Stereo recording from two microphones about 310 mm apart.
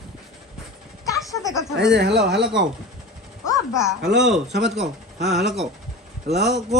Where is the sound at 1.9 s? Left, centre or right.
Right.